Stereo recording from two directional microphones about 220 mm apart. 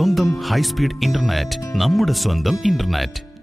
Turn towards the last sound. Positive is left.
turn(degrees=0)  # may be behind; listen again after turning